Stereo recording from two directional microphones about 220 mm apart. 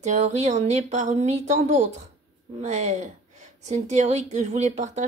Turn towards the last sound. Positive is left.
turn(degrees=-30)  # may be behind; listen again after turning